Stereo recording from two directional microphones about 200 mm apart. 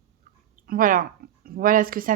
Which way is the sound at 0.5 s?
45° right (ahead or behind).